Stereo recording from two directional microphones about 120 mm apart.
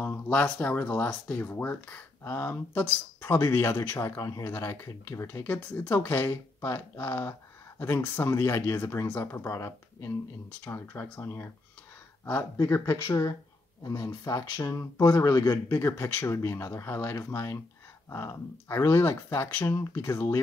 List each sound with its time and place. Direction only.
0.0 s speech: 15° left (ahead or behind)
12.5 s speech: 25° left (ahead or behind)
15.7 s speech: 20° left (ahead or behind)